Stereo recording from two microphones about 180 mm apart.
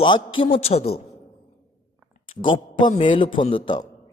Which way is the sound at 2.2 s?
30° left (ahead or behind).